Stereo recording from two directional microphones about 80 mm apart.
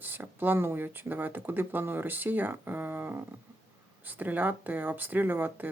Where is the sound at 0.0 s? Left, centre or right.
Right.